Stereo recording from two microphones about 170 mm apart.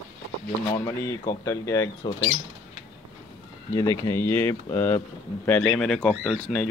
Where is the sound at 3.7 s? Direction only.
20° left (ahead or behind).